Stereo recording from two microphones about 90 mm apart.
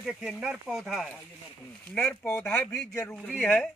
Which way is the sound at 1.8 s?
15° left (ahead or behind).